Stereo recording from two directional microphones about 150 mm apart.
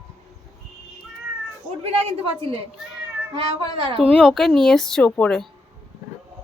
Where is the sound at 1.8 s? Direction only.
40° right (ahead or behind).